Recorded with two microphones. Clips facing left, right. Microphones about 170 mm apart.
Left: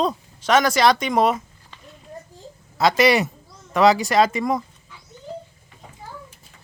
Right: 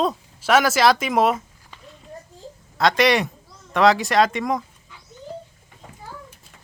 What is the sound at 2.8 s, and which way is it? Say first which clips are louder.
Speech: left 1 dB; 5° left (ahead or behind).